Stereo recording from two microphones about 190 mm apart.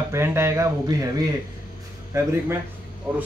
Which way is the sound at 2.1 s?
15° right (ahead or behind).